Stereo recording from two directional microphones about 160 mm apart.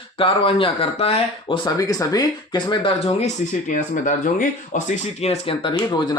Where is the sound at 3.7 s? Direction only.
55° left (ahead or behind).